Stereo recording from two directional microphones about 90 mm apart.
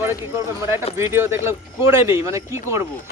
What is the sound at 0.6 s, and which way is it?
A woman's voice, 30° right (ahead or behind).